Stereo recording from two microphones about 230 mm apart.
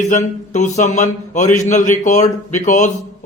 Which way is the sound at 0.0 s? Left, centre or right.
Left.